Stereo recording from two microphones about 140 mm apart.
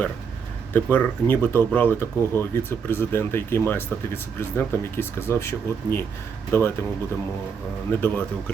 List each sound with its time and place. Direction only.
0.7 s speech: 15° left (ahead or behind)
8.0 s speech: 15° left (ahead or behind)